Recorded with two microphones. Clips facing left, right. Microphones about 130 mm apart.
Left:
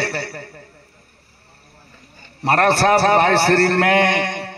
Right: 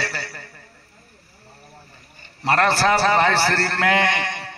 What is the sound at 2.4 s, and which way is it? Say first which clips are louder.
A man's voice: left 3 dB; 55° left (ahead or behind).